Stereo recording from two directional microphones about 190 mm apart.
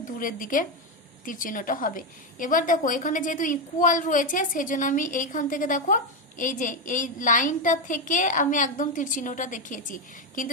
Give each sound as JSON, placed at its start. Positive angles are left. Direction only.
{"t": 0.0, "sound": "a woman's voice", "side_deg": 45}